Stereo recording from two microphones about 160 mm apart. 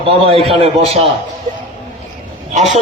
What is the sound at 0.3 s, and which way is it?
Speech, 35° right (ahead or behind).